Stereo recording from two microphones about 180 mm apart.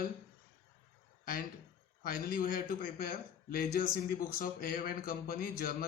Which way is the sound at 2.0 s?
55° left (ahead or behind).